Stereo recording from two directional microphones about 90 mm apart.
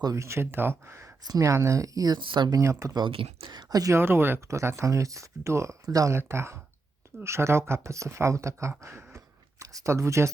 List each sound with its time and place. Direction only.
0.0 s speech: 35° right (ahead or behind)
1.2 s speech: 40° right (ahead or behind)
2.1 s speech: 60° right (ahead or behind)
2.5 s speech: 35° right (ahead or behind)
3.1 s speech: 90° right
3.5 s speech: 45° right (ahead or behind)
3.9 s speech: 25° right (ahead or behind)
6.1 s speech: 30° right (ahead or behind)
8.8 s a sound: 30° right (ahead or behind)